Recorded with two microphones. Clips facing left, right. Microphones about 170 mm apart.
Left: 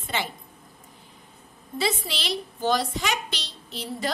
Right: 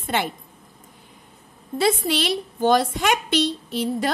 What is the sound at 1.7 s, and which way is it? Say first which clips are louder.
A woman's voice: right 7 dB; 55° right (ahead or behind).